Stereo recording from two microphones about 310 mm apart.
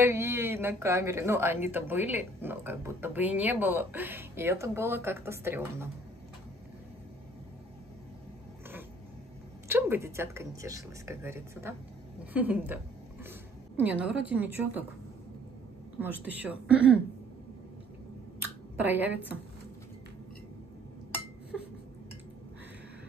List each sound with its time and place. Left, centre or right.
0.0 s a woman's voice: centre
9.7 s a woman's voice: centre
16.0 s a woman's voice: centre
18.9 s a woman's voice: centre
21.5 s a sound: centre